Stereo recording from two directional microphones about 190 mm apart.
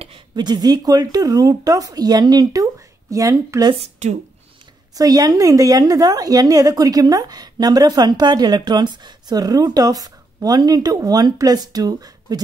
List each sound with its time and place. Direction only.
0.0 s a woman's voice: 25° right (ahead or behind)
3.8 s a woman's voice: 35° right (ahead or behind)
4.9 s a woman's voice: 20° right (ahead or behind)